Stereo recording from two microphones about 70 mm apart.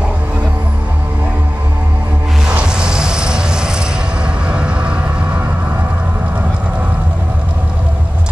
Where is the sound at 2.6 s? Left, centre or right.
Centre.